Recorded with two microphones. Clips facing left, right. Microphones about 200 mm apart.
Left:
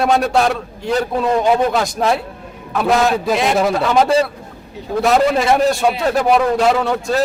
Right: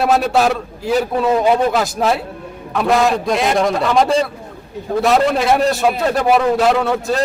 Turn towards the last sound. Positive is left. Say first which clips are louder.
# even
turn(degrees=0)  # may be behind; listen again after turning